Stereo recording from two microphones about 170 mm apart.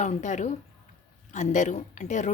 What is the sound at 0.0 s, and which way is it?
Speech, 45° left (ahead or behind).